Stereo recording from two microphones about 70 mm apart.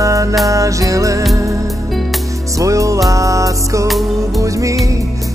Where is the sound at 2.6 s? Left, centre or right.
Right.